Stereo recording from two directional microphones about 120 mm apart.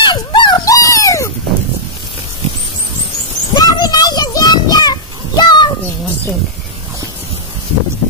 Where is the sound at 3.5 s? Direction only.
35° left (ahead or behind).